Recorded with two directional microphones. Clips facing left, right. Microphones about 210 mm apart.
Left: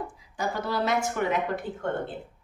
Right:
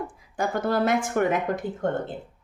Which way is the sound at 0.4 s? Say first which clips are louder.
Right 5 dB; 50° right (ahead or behind).